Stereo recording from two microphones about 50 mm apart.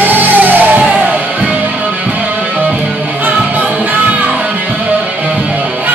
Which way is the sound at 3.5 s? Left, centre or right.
Right.